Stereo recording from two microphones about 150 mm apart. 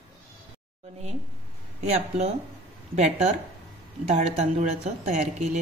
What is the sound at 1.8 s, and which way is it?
A woman's voice, 45° right (ahead or behind).